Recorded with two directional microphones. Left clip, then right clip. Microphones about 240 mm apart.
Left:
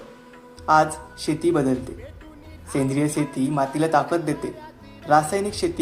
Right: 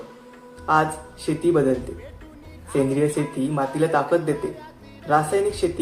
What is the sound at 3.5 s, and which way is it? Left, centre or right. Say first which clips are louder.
Speech: left 1 dB; left.